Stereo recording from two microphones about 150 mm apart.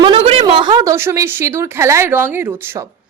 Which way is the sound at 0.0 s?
40° right (ahead or behind).